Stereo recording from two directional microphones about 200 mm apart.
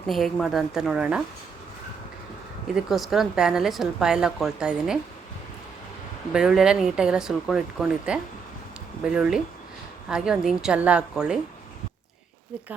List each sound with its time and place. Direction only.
0.1 s a woman's voice: centre (ahead or behind)
2.7 s a woman's voice: centre (ahead or behind)
6.3 s a woman's voice: 5° right (ahead or behind)